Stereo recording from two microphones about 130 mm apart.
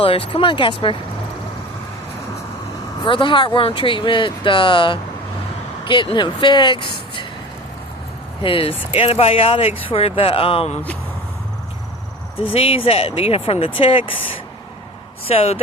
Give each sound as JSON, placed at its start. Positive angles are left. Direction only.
{"t": 0.0, "sound": "speech", "side_deg": 45}
{"t": 3.1, "sound": "speech", "side_deg": 40}
{"t": 8.4, "sound": "speech", "side_deg": 45}
{"t": 12.4, "sound": "speech", "side_deg": 45}